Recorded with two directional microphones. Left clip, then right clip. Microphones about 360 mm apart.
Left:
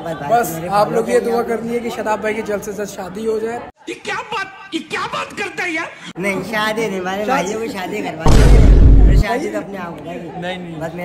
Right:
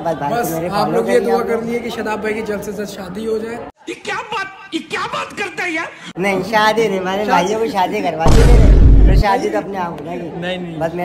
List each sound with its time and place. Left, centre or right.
0.3 s a man's voice: centre
4.1 s a woman's voice: centre
8.3 s boom: centre
9.1 s music: centre